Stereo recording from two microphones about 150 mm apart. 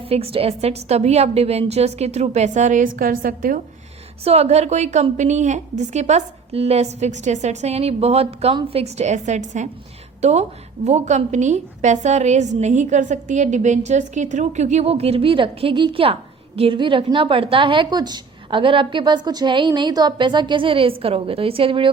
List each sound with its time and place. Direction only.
0.1 s a woman's voice: 40° right (ahead or behind); by 3.6 s 65° right (ahead or behind)
4.2 s a woman's voice: 45° right (ahead or behind)